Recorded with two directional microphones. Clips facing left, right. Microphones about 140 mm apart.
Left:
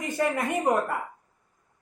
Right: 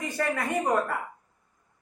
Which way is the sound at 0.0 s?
20° left (ahead or behind).